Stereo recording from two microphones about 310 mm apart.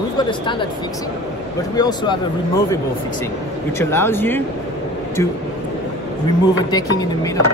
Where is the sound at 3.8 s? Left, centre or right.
Centre.